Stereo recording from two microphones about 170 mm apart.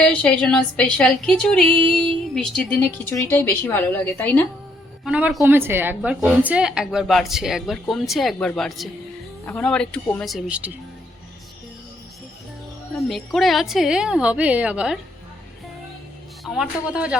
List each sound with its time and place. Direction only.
0.0 s a woman's voice: 5° left (ahead or behind)
5.0 s a woman's voice: 5° right (ahead or behind)
13.1 s a woman's voice: centre (ahead or behind)
16.4 s speech: 5° right (ahead or behind)